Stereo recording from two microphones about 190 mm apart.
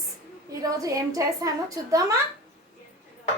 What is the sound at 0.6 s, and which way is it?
A woman's voice, 20° right (ahead or behind).